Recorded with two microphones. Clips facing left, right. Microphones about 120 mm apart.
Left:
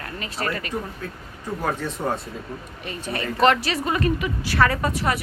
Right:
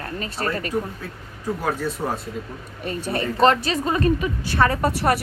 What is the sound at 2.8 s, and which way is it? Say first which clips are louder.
A woman's voice: right 4 dB; 35° right (ahead or behind).